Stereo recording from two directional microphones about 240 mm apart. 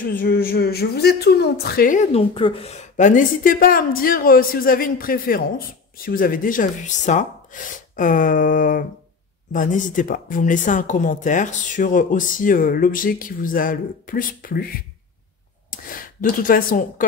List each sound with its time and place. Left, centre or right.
0.1 s speech: left
15.7 s speech: left